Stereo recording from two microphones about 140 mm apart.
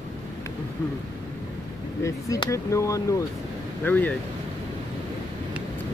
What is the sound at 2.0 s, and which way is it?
Speech, 25° left (ahead or behind).